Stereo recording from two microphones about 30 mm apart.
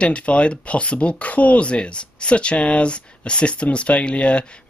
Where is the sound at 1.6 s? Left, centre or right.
Left.